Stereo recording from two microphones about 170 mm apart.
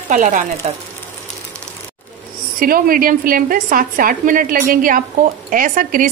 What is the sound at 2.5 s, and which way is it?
A woman's voice, 55° right (ahead or behind).